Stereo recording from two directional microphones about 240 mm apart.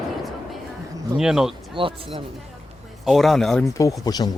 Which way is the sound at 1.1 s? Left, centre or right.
Centre.